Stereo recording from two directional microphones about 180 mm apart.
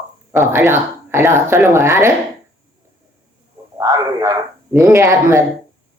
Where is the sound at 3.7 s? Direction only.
20° right (ahead or behind).